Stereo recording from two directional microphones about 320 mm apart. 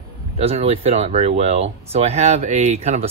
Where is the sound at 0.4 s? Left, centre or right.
Centre.